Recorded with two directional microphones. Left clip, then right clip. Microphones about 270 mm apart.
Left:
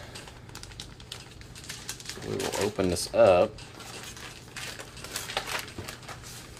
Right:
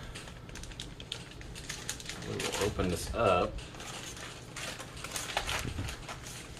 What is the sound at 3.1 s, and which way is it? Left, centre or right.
Speech, left.